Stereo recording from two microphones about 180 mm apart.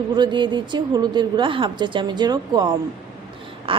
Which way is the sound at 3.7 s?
30° right (ahead or behind).